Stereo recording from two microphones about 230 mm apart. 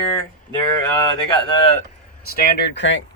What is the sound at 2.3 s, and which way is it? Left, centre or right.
Speech, left.